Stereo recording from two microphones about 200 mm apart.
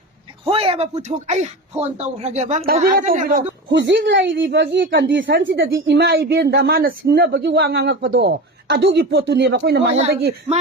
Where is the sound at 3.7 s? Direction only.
65° right (ahead or behind).